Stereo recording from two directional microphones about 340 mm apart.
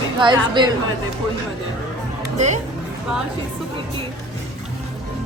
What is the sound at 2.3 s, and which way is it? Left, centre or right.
Speech, right.